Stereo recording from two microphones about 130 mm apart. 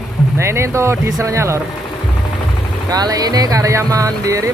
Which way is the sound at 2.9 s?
30° right (ahead or behind).